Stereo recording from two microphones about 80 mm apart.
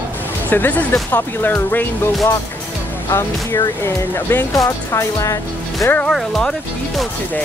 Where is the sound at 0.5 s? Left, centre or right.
Left.